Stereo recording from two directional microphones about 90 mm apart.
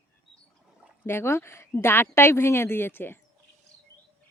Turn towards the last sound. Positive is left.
turn(degrees=25)  # may be behind; listen again after turning